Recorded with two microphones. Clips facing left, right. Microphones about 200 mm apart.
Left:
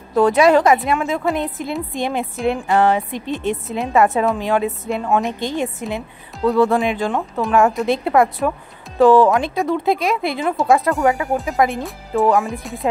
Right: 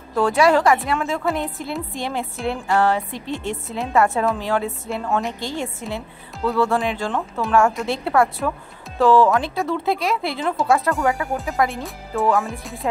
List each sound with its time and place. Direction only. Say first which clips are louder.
0.1 s a woman's voice: left 4 dB; 20° left (ahead or behind)
12.4 s speech: left 4 dB; centre (ahead or behind)